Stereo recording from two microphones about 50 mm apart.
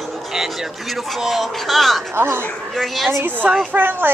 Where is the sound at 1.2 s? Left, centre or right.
Centre.